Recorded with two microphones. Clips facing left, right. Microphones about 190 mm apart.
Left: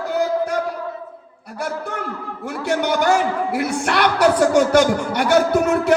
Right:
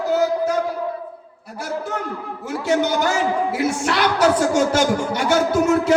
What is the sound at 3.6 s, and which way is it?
A woman's voice, 60° left (ahead or behind).